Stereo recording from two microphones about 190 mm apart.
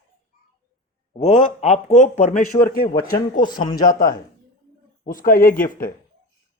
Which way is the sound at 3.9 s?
45° left (ahead or behind).